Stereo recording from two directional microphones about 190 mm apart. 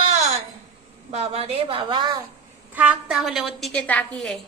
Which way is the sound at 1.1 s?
30° right (ahead or behind).